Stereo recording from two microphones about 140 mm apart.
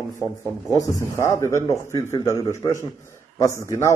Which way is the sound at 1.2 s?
20° left (ahead or behind).